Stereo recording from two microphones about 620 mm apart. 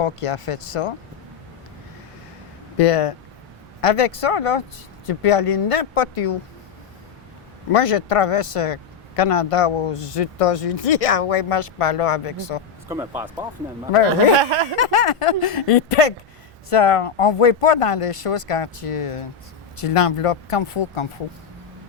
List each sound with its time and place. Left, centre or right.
0.0 s speech: left
2.7 s speech: left
7.7 s speech: left
12.9 s speech: centre
14.8 s speech: left